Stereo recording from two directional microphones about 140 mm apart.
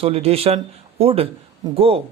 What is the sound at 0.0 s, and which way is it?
Speech, 45° right (ahead or behind).